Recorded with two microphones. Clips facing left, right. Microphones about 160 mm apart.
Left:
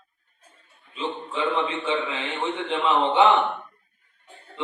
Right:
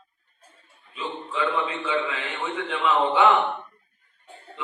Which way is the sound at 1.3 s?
25° left (ahead or behind).